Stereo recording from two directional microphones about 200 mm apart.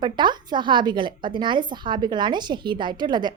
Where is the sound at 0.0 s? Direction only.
20° right (ahead or behind).